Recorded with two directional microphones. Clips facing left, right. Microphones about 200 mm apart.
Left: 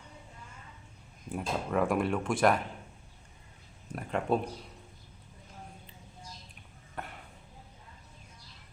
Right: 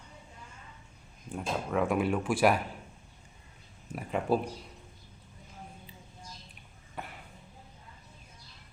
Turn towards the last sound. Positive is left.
turn(degrees=0)  # may be behind; listen again after turning